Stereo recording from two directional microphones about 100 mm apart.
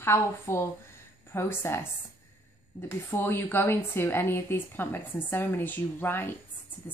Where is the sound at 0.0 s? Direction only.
25° left (ahead or behind).